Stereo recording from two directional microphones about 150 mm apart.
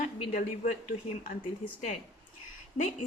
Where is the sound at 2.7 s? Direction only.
55° left (ahead or behind).